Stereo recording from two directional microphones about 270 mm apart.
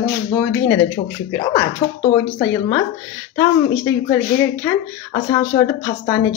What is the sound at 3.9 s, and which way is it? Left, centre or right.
Speech, centre.